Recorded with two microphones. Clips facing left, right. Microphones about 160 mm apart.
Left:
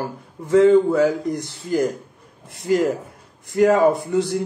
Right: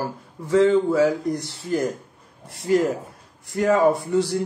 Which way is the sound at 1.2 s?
20° left (ahead or behind).